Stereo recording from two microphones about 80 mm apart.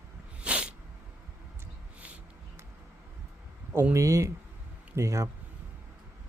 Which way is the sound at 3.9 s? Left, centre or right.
Right.